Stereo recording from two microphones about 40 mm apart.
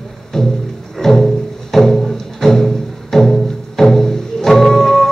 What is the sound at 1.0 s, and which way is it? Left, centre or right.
Music, centre.